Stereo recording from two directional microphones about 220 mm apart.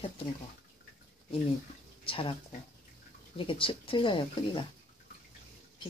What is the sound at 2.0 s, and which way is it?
Speech, 25° left (ahead or behind).